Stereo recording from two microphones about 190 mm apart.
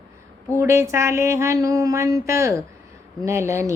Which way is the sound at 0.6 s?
15° right (ahead or behind).